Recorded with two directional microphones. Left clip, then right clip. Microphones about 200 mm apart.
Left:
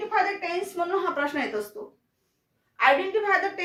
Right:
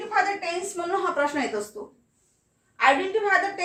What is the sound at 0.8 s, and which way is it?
Speech, 10° left (ahead or behind).